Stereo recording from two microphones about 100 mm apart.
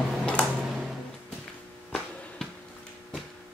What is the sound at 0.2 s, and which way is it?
Tick-tock, 10° left (ahead or behind).